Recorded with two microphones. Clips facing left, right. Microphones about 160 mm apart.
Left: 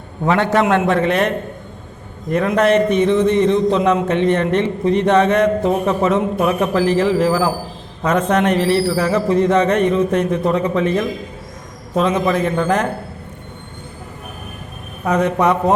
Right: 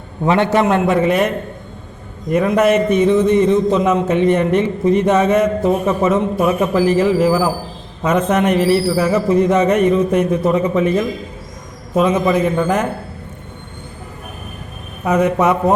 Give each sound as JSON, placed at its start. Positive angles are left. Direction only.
{"t": 0.3, "sound": "a man's voice", "side_deg": -20}
{"t": 0.8, "sound": "a man's voice", "side_deg": -5}
{"t": 2.3, "sound": "a man's voice", "side_deg": -5}
{"t": 15.0, "sound": "a man's voice", "side_deg": -5}